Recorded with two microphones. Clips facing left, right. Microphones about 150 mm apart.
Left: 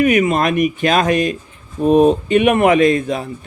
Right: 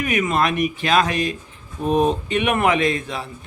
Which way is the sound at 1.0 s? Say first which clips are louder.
Left 7 dB; 30° right (ahead or behind).